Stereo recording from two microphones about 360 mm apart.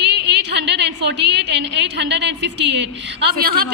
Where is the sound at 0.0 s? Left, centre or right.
Right.